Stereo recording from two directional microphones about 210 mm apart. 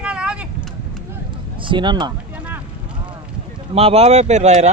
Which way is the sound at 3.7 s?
30° right (ahead or behind).